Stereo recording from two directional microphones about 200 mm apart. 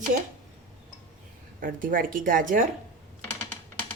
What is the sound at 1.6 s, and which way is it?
A woman's voice, 45° right (ahead or behind).